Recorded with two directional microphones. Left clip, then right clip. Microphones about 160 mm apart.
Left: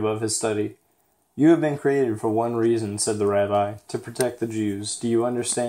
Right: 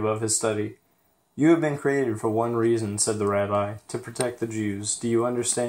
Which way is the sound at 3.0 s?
35° left (ahead or behind).